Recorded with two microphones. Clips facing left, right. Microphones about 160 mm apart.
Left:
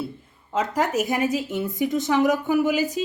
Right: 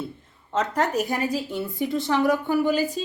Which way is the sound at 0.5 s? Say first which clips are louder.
Even; 10° left (ahead or behind).